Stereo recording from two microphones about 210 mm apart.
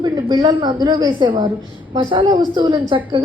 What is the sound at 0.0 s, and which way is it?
A woman's voice, 20° right (ahead or behind).